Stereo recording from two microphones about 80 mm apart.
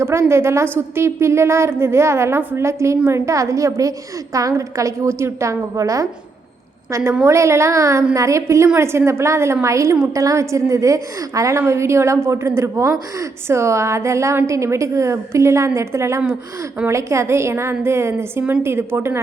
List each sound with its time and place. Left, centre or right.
0.0 s a woman's voice: right
6.9 s a woman's voice: right